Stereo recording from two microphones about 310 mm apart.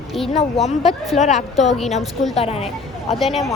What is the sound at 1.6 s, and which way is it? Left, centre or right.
Speech, centre.